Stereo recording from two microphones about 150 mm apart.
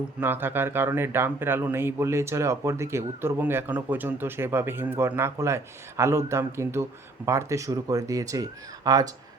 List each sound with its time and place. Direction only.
0.2 s speech: 15° right (ahead or behind)